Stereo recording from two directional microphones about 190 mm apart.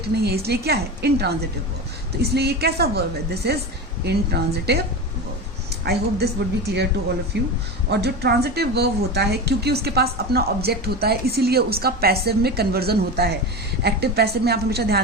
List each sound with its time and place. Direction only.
0.2 s a woman's voice: 55° right (ahead or behind)
5.8 s a woman's voice: 60° right (ahead or behind)
7.3 s a woman's voice: 65° right (ahead or behind)